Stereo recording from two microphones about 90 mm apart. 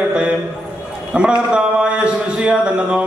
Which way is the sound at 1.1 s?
10° right (ahead or behind).